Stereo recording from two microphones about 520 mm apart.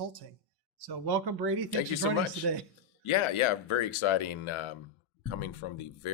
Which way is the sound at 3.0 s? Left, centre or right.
Left.